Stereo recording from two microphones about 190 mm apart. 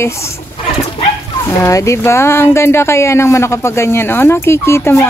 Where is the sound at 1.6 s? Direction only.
15° left (ahead or behind).